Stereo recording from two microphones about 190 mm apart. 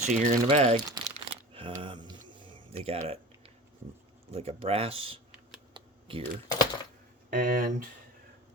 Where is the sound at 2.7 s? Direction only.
35° right (ahead or behind).